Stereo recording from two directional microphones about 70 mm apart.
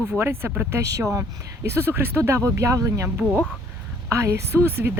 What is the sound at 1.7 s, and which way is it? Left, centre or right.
Speech, right.